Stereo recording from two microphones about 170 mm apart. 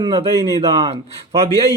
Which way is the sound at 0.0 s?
25° right (ahead or behind).